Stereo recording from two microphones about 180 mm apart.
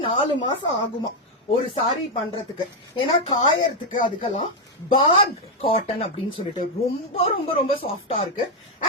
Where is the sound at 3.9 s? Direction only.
30° left (ahead or behind).